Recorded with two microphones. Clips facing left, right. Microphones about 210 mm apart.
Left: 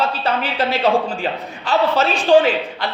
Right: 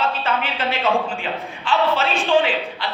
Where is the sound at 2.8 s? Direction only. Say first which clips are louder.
Left 3 dB; 45° left (ahead or behind).